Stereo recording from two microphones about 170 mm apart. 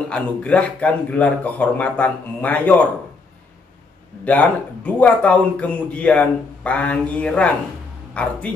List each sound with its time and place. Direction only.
0.1 s speech: 5° left (ahead or behind)
4.2 s speech: 10° left (ahead or behind)